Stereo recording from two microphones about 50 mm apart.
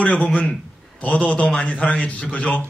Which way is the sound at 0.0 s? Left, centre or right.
Left.